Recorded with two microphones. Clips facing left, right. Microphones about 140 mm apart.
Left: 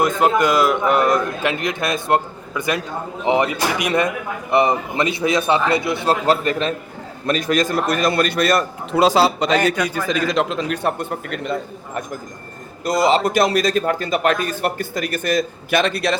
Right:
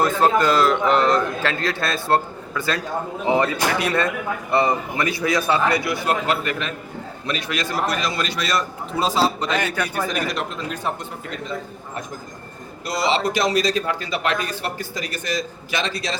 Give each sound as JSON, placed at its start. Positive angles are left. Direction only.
{"t": 0.0, "sound": "a man's voice", "side_deg": 15}
{"t": 6.2, "sound": "a man's voice", "side_deg": 35}
{"t": 8.9, "sound": "speech", "side_deg": 75}
{"t": 10.3, "sound": "speech", "side_deg": 90}
{"t": 12.8, "sound": "a man's voice", "side_deg": 45}